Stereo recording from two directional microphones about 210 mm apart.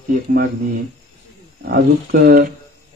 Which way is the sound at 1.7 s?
45° right (ahead or behind).